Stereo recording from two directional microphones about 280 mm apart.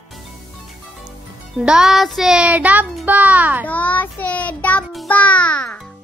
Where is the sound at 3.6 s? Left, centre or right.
Centre.